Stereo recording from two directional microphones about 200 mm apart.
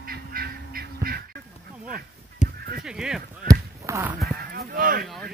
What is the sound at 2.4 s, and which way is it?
Honk, 35° left (ahead or behind).